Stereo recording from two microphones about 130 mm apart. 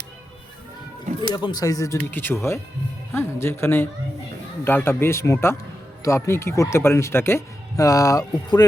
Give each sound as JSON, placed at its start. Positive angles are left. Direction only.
{"t": 1.3, "sound": "speech", "side_deg": 35}